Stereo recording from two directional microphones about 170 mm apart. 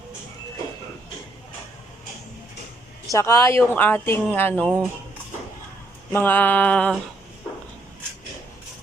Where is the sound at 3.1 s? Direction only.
15° left (ahead or behind).